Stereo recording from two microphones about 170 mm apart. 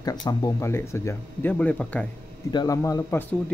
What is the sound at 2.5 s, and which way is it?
Speech, 20° left (ahead or behind).